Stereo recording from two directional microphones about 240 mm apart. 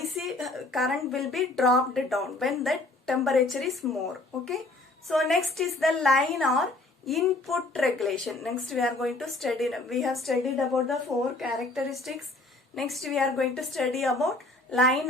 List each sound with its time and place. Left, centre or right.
0.0 s a woman's voice: centre